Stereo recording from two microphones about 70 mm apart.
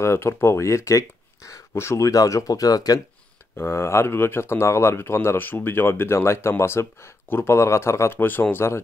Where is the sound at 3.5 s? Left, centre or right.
Left.